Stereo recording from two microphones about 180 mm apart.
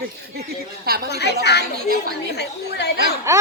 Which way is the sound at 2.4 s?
65° left (ahead or behind).